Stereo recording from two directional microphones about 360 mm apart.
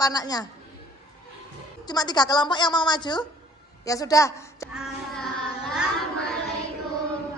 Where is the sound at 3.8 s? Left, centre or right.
Centre.